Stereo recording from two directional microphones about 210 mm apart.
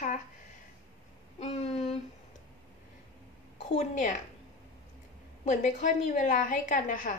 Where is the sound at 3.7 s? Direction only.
35° left (ahead or behind).